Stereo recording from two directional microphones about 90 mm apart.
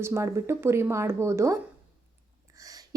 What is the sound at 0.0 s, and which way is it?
Speech, 30° right (ahead or behind).